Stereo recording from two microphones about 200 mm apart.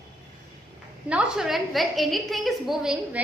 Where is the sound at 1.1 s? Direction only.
5° right (ahead or behind).